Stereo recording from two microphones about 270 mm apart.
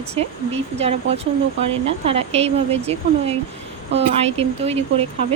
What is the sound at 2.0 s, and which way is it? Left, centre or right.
Speech, right.